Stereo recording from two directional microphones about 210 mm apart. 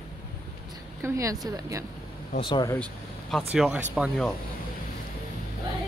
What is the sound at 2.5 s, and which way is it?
Speech, 20° left (ahead or behind).